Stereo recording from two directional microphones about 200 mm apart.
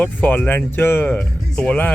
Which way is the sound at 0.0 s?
10° left (ahead or behind).